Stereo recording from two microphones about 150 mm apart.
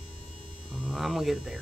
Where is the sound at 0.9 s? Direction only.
Centre (ahead or behind).